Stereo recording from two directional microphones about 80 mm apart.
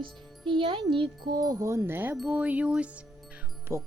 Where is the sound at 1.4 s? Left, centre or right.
Right.